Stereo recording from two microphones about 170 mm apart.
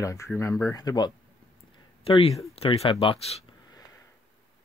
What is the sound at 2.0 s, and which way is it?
Speech, 35° left (ahead or behind).